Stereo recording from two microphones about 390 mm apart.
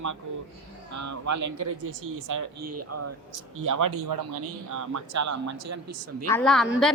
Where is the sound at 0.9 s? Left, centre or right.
Right.